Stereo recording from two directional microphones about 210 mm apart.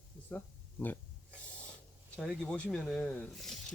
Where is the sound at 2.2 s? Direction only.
5° left (ahead or behind).